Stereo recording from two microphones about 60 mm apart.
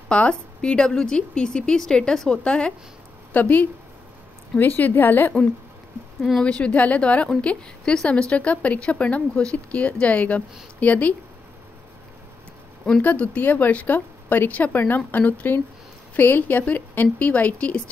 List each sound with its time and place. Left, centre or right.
0.1 s a woman's voice: centre
3.3 s a woman's voice: left
6.4 s speech: centre
13.0 s speech: left